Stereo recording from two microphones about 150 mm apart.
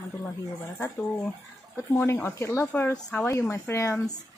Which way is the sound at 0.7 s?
10° left (ahead or behind).